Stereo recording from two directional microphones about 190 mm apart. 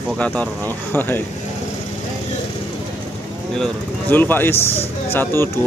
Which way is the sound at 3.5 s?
5° left (ahead or behind).